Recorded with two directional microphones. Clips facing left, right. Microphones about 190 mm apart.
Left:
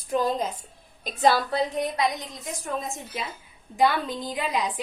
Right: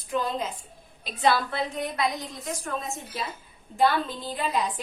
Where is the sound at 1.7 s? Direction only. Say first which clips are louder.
Left 2 dB; 20° left (ahead or behind).